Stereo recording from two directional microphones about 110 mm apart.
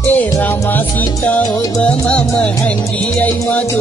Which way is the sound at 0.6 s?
15° left (ahead or behind).